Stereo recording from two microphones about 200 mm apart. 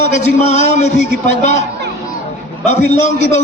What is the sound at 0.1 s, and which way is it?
A man's voice, 35° left (ahead or behind).